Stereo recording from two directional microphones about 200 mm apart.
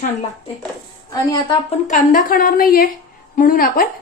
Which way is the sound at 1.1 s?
20° left (ahead or behind).